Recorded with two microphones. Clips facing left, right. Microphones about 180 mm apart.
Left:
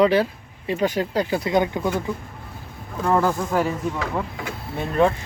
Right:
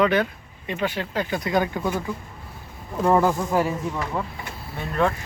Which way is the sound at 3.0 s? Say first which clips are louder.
Right 1 dB; 15° right (ahead or behind).